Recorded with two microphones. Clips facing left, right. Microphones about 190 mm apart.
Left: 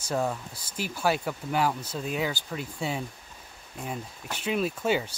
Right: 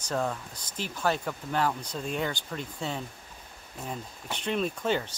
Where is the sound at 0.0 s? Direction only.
10° left (ahead or behind).